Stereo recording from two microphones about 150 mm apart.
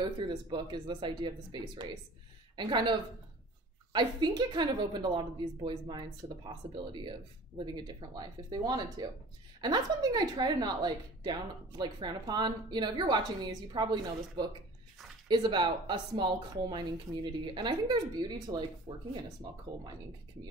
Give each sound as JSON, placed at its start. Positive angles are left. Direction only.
{"t": 0.0, "sound": "a woman's voice", "side_deg": -30}